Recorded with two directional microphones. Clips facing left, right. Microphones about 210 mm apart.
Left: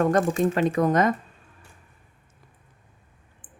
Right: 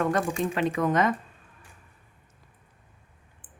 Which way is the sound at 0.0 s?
40° left (ahead or behind).